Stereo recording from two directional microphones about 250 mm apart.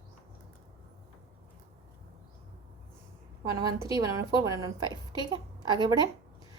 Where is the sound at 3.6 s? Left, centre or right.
Centre.